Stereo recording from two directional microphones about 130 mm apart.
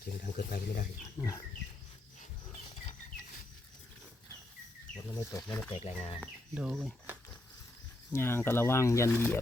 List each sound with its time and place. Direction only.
0.1 s speech: 90° left
1.2 s speech: 25° left (ahead or behind)
5.1 s speech: 30° left (ahead or behind)
5.7 s speech: 50° left (ahead or behind)
6.5 s speech: 5° right (ahead or behind)
8.1 s speech: 20° left (ahead or behind)
9.0 s speech: 15° right (ahead or behind)